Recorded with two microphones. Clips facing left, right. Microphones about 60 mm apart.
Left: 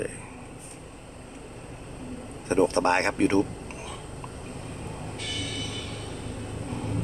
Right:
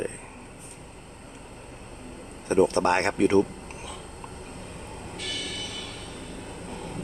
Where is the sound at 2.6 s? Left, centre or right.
Left.